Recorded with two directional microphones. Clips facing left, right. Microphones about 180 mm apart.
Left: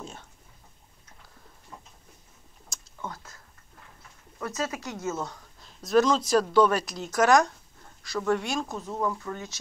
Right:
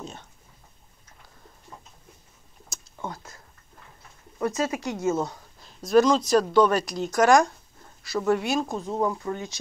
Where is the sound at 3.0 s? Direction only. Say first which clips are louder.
Right 3 dB; 30° right (ahead or behind).